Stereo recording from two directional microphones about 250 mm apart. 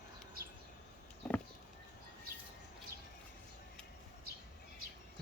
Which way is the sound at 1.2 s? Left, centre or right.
Centre.